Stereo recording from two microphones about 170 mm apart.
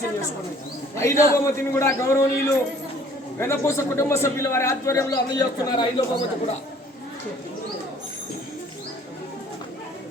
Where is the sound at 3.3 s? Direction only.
15° left (ahead or behind).